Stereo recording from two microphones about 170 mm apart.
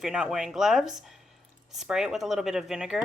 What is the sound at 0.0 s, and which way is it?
Speech, 5° right (ahead or behind).